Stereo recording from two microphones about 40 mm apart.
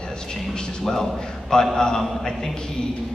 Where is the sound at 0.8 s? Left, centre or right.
Centre.